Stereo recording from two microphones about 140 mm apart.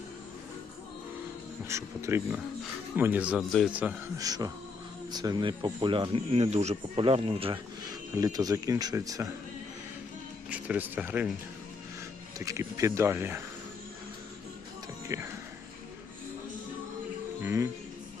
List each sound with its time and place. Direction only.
1.6 s speech: 20° right (ahead or behind)
4.2 s speech: 25° right (ahead or behind)
8.1 s speech: 25° right (ahead or behind)
10.5 s speech: 10° right (ahead or behind)
12.4 s speech: 25° right (ahead or behind)
15.0 s speech: 20° right (ahead or behind)
17.4 s speech: 20° right (ahead or behind)